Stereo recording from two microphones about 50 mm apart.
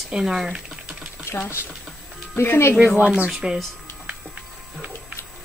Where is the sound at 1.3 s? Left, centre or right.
Left.